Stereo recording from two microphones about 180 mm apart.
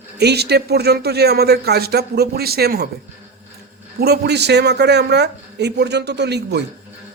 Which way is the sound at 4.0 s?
65° right (ahead or behind).